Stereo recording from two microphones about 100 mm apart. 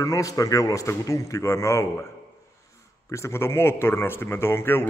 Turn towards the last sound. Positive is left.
turn(degrees=25)  # may be behind; listen again after turning